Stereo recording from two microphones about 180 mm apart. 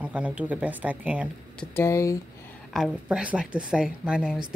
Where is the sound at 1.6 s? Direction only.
15° left (ahead or behind).